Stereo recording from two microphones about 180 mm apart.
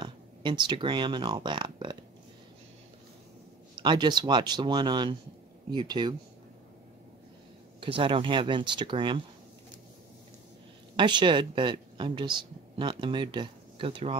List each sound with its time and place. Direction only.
0.0 s speech: 25° right (ahead or behind)
3.7 s speech: 25° right (ahead or behind)
7.8 s speech: 30° right (ahead or behind)
11.0 s speech: 25° right (ahead or behind)